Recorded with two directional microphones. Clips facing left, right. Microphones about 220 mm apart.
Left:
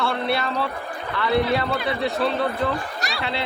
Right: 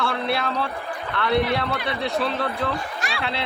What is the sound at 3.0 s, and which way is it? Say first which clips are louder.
Speech: even; 40° left (ahead or behind).